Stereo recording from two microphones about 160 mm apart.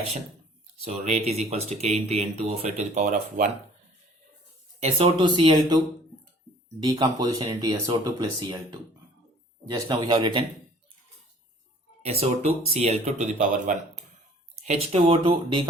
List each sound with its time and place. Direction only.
0.8 s speech: 45° right (ahead or behind)
4.8 s speech: 35° right (ahead or behind)
6.8 s speech: 25° right (ahead or behind)
12.2 s speech: 40° right (ahead or behind)